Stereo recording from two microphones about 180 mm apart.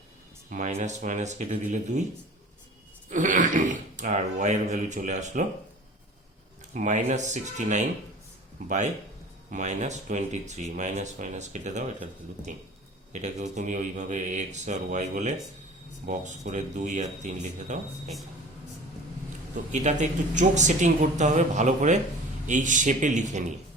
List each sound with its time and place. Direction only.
0.5 s speech: 45° right (ahead or behind)
3.1 s speech: 45° right (ahead or behind)
6.7 s speech: 45° right (ahead or behind)
9.5 s speech: 40° right (ahead or behind)
13.1 s speech: 40° right (ahead or behind)
19.7 s speech: 40° right (ahead or behind)